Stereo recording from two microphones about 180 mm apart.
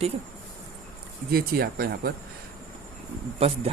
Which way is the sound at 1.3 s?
55° right (ahead or behind).